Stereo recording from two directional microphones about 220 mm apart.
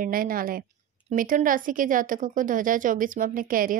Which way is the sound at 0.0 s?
40° right (ahead or behind).